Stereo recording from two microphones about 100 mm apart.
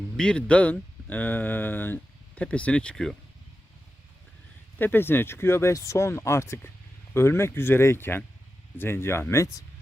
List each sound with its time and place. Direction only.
0.2 s speech: 10° left (ahead or behind)
4.8 s speech: 20° left (ahead or behind)